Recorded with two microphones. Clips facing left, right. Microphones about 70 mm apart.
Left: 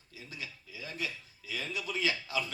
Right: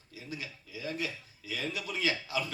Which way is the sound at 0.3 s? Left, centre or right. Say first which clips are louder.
Right 4 dB; right.